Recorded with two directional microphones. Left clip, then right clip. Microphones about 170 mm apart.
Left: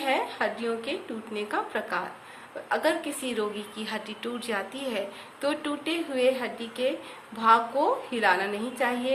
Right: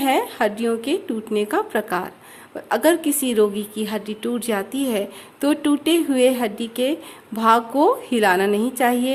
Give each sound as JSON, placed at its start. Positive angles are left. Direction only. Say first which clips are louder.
{"t": 0.0, "sound": "a woman's voice", "louder": "right 7 dB", "side_deg": -60}